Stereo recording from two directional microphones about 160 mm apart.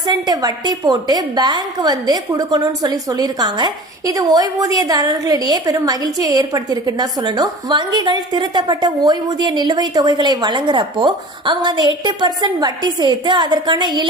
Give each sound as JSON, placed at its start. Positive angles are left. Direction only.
{"t": 0.1, "sound": "a woman's voice", "side_deg": -25}